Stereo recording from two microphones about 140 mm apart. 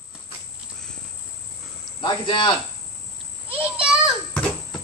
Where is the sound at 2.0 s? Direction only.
35° left (ahead or behind).